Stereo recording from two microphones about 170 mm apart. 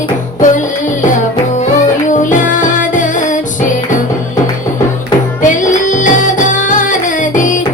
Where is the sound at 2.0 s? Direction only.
50° left (ahead or behind).